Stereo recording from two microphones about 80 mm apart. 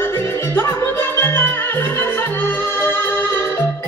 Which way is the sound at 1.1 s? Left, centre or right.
Left.